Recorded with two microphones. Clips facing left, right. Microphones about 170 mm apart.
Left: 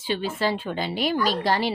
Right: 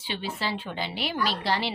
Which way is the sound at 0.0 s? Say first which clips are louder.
Left 7 dB; 45° left (ahead or behind).